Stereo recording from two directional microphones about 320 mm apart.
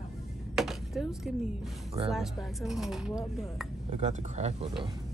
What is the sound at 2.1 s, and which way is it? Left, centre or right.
Speech, centre.